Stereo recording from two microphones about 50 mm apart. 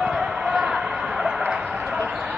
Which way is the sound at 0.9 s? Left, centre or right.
Right.